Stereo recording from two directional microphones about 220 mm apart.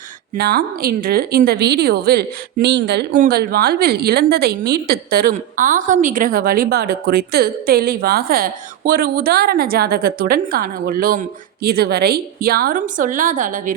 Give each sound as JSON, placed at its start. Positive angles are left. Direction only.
{"t": 0.3, "sound": "a woman's voice", "side_deg": -45}